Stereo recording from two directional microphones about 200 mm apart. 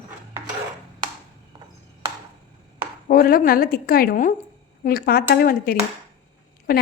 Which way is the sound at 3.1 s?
45° left (ahead or behind).